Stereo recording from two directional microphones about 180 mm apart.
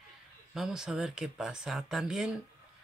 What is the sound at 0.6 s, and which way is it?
Speech, 5° right (ahead or behind).